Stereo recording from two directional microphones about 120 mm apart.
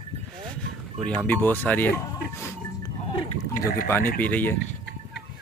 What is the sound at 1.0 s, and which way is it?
Speech, 10° left (ahead or behind).